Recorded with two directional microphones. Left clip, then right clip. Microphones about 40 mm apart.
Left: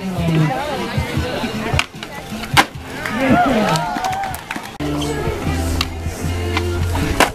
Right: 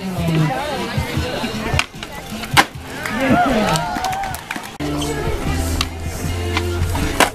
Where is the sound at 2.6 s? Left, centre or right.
Centre.